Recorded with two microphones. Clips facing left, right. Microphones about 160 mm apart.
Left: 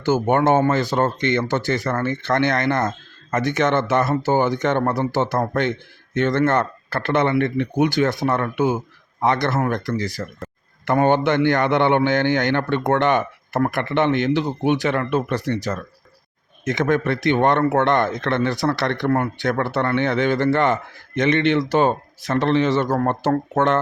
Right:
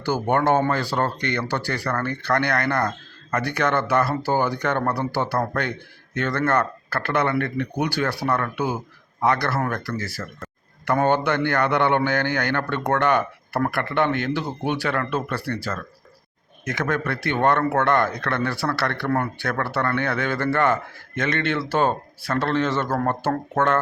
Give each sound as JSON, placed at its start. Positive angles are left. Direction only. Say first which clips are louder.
{"t": 0.0, "sound": "speech", "louder": "left 4 dB", "side_deg": 20}